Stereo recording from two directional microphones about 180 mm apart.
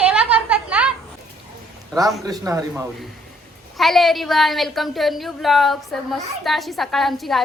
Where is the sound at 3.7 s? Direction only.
Centre (ahead or behind).